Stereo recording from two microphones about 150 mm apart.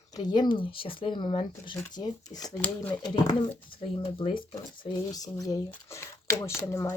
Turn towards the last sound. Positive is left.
turn(degrees=20)  # may be behind; listen again after turning